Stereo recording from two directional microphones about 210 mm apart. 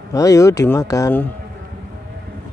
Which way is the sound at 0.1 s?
15° left (ahead or behind).